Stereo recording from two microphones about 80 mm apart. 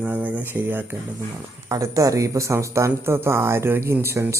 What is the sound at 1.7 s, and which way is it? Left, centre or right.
Speech, right.